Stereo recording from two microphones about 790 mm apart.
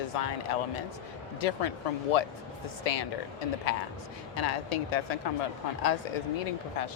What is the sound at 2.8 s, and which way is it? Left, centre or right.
Speech, left.